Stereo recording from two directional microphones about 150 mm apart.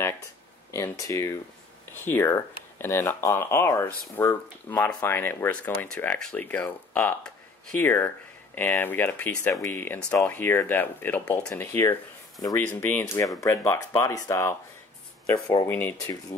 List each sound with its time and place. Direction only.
0.7 s speech: 20° left (ahead or behind)